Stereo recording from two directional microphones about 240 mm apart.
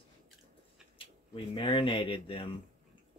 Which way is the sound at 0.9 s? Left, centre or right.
Left.